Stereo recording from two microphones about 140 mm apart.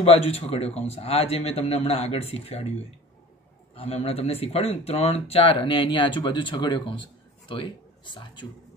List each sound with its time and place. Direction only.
0.0 s speech: 45° left (ahead or behind)
3.7 s speech: 45° left (ahead or behind)